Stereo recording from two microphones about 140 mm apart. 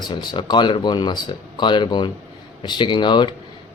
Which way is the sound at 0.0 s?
30° left (ahead or behind).